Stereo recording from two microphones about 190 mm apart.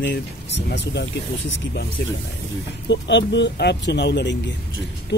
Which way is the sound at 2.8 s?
70° left (ahead or behind).